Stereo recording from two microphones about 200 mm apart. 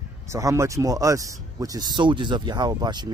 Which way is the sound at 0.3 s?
15° right (ahead or behind).